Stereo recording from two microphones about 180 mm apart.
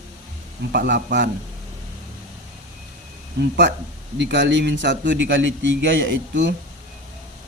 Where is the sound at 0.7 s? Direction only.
60° right (ahead or behind).